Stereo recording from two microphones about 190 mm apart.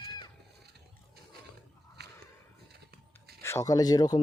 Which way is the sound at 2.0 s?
60° right (ahead or behind).